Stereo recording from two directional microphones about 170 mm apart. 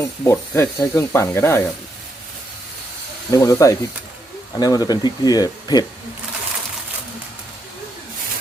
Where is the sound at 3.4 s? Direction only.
20° left (ahead or behind).